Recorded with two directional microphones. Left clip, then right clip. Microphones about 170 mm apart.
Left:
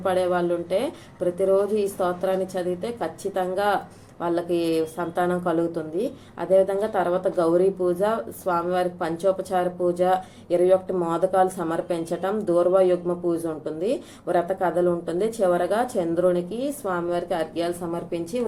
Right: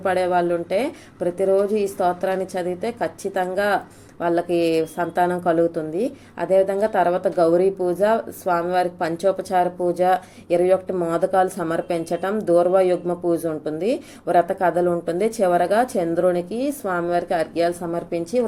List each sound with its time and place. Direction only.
0.0 s a woman's voice: 30° right (ahead or behind)